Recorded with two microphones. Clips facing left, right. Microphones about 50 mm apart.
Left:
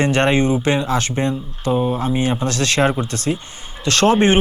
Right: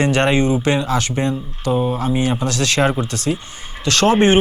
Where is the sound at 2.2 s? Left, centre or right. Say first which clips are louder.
Even; left.